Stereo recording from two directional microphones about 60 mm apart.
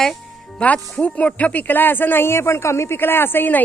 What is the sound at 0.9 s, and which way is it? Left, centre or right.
Speech, left.